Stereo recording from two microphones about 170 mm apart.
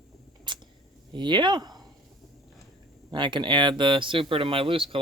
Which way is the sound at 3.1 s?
25° right (ahead or behind).